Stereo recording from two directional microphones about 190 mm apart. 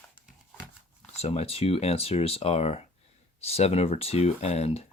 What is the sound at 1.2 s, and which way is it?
Speech, 35° left (ahead or behind).